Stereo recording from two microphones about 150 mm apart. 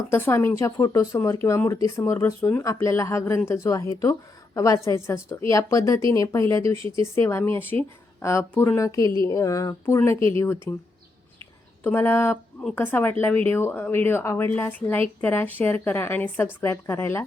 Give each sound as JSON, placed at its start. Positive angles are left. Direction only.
{"t": 0.1, "sound": "speech", "side_deg": 15}
{"t": 10.2, "sound": "speech", "side_deg": -35}
{"t": 10.7, "sound": "speech", "side_deg": 15}